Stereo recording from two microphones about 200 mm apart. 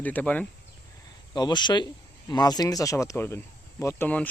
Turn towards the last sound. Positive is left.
turn(degrees=10)  # may be behind; listen again after turning